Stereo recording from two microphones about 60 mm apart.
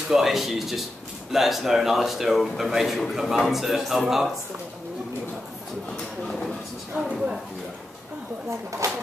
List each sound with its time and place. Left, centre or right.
0.1 s a man's voice: centre
5.9 s speech: centre
7.0 s speech: centre
8.5 s speech: right